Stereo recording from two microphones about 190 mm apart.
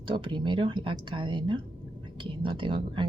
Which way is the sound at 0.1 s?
25° right (ahead or behind).